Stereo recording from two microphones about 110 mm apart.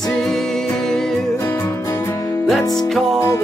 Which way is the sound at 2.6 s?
35° left (ahead or behind).